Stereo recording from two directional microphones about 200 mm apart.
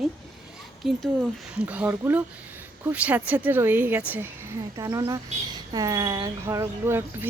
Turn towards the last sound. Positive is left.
turn(degrees=-10)  # may be behind; listen again after turning